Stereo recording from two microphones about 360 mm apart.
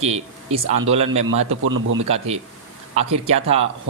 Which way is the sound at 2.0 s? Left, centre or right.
Centre.